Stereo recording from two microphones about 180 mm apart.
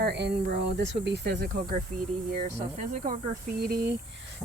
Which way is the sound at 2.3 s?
45° right (ahead or behind).